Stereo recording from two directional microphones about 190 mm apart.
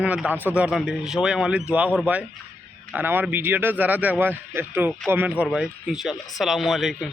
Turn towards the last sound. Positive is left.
turn(degrees=0)  # may be behind; listen again after turning